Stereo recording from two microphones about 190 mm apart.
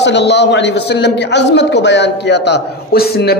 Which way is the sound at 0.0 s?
65° left (ahead or behind).